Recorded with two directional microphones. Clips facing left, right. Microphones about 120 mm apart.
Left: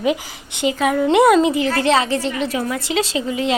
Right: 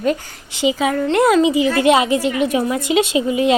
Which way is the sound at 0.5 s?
5° right (ahead or behind).